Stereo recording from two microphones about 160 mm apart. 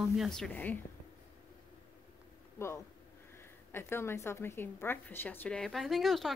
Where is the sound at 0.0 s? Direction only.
Centre (ahead or behind).